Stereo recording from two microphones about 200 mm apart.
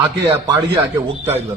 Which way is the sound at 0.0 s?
20° right (ahead or behind).